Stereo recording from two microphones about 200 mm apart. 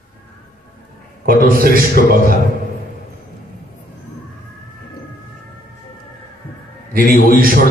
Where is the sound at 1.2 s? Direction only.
45° right (ahead or behind).